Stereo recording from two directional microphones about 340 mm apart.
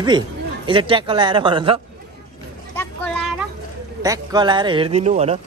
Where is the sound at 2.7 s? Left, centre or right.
Centre.